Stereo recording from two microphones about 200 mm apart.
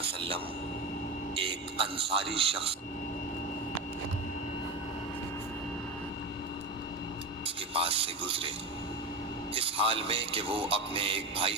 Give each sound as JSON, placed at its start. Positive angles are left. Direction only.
{"t": 0.2, "sound": "a man's voice", "side_deg": -25}
{"t": 7.4, "sound": "radio", "side_deg": -30}
{"t": 9.6, "sound": "speech", "side_deg": -25}